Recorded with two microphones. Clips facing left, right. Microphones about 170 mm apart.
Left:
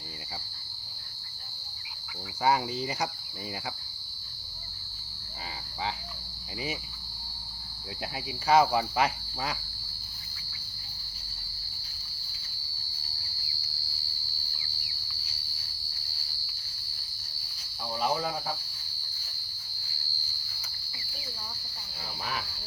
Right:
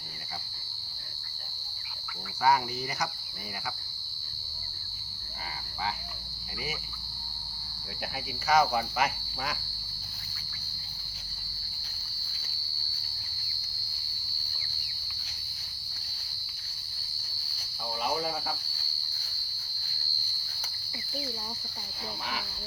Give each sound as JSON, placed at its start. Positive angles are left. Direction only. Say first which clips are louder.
{"t": 2.4, "sound": "speech", "louder": "even", "side_deg": 25}
{"t": 8.4, "sound": "speech", "louder": "left 2 dB", "side_deg": 30}